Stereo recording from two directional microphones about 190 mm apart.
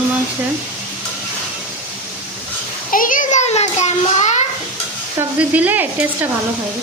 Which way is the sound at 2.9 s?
45° left (ahead or behind).